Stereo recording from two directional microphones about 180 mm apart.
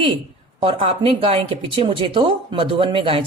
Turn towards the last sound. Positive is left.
turn(degrees=-30)  # may be behind; listen again after turning